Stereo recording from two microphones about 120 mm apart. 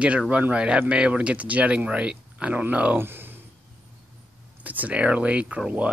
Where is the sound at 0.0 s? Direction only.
10° right (ahead or behind).